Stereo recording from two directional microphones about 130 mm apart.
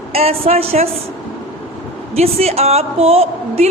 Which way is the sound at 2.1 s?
50° right (ahead or behind).